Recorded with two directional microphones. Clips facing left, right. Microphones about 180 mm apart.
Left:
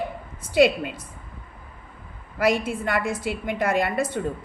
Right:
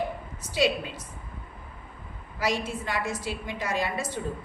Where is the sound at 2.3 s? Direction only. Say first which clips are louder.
Left 6 dB; 55° left (ahead or behind).